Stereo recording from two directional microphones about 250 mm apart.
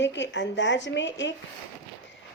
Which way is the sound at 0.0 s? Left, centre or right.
Left.